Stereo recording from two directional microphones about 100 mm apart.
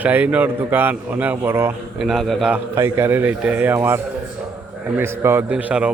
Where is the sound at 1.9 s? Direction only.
Centre (ahead or behind).